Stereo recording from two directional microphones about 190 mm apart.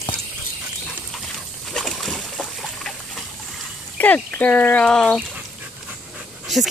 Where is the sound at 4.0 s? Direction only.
10° left (ahead or behind).